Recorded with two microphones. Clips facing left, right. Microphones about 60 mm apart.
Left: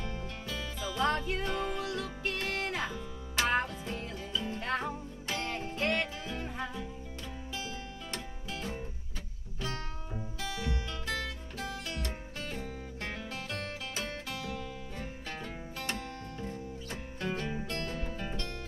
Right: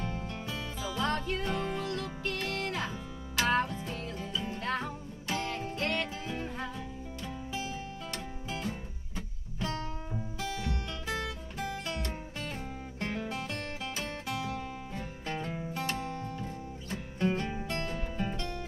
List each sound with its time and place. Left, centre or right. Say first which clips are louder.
0.0 s music: right 3 dB; centre
1.0 s music: left 2 dB; centre
1.9 s music: even; centre
4.2 s music: right 1 dB; centre
4.6 s music: even; centre
8.5 s music: right 3 dB; centre
10.4 s music: even; right
12.4 s music: right 1 dB; centre
16.3 s music: even; centre
17.2 s music: right 4 dB; centre
17.6 s music: right 2 dB; centre